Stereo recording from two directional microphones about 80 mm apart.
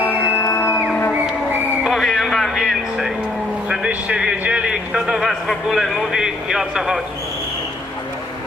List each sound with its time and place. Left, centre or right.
0.4 s a sound: left
1.8 s music: centre
3.7 s a man's voice: centre